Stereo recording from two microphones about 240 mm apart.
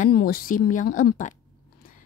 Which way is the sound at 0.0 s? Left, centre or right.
Left.